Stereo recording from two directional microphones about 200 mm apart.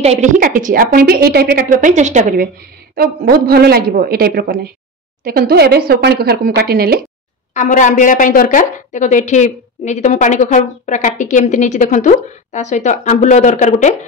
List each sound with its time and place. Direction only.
0.0 s a woman's voice: 35° right (ahead or behind); by 7.0 s 50° right (ahead or behind)
7.5 s a woman's voice: 40° left (ahead or behind)